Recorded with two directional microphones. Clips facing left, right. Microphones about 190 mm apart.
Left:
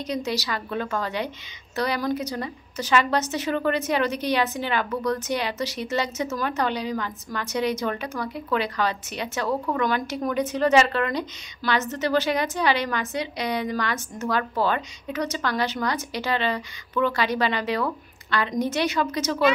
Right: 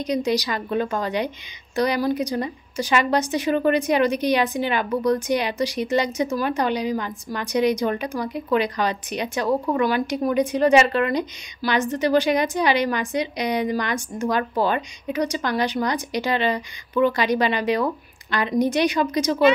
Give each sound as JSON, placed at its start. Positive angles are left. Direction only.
{"t": 0.0, "sound": "a woman's voice", "side_deg": -15}